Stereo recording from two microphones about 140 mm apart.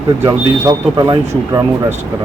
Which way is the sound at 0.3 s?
30° right (ahead or behind).